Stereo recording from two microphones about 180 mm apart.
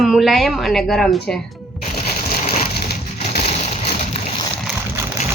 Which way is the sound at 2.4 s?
40° left (ahead or behind).